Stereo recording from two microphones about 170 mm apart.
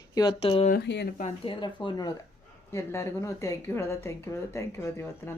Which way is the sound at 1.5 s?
25° left (ahead or behind).